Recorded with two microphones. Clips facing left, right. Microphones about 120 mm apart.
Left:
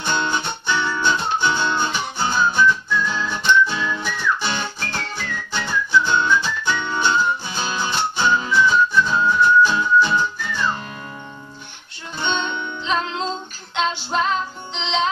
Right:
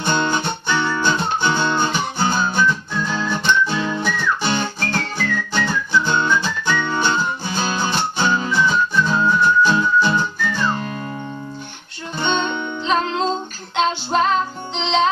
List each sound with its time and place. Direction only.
0.0 s music: 45° right (ahead or behind)
12.2 s music: 45° right (ahead or behind)